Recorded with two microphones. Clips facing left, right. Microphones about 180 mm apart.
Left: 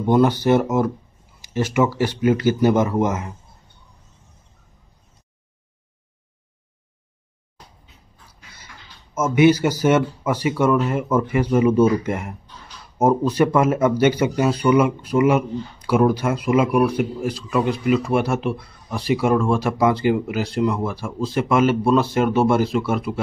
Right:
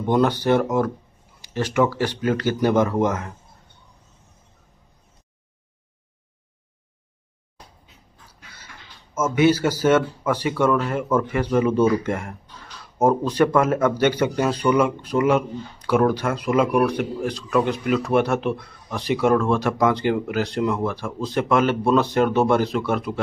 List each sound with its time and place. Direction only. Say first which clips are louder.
0.0 s speech: left 3 dB; 10° left (ahead or behind)
9.1 s speech: left 3 dB; 10° left (ahead or behind)